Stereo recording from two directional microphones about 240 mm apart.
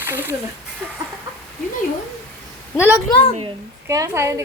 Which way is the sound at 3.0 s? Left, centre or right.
Left.